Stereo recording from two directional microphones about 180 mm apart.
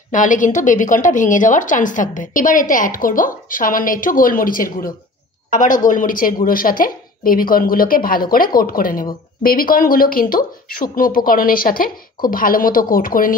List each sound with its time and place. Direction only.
0.1 s a woman's voice: 45° left (ahead or behind)